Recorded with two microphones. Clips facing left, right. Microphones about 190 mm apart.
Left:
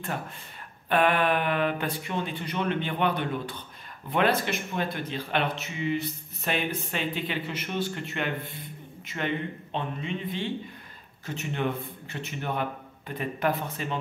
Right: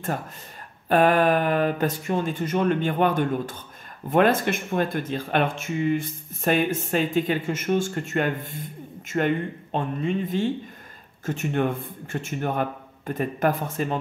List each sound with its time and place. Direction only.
0.8 s speech: 40° right (ahead or behind)